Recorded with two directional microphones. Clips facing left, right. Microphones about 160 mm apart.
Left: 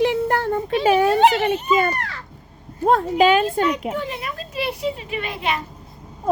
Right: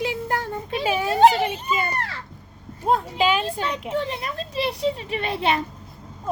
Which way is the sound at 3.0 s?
50° left (ahead or behind).